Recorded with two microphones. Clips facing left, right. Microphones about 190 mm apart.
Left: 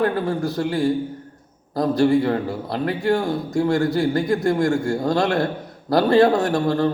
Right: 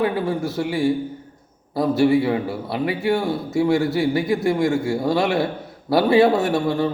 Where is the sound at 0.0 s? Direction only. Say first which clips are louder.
Even; 5° right (ahead or behind).